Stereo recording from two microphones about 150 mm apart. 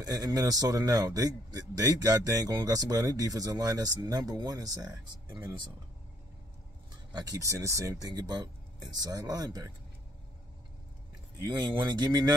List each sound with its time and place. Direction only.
0.0 s speech: 25° right (ahead or behind)
7.1 s speech: 25° right (ahead or behind)
11.3 s speech: 30° right (ahead or behind)